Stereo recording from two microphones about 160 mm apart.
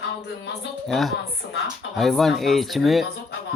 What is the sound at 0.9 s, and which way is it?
Speech, centre (ahead or behind).